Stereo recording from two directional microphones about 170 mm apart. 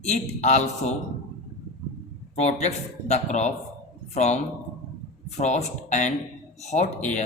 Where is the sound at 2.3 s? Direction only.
40° left (ahead or behind).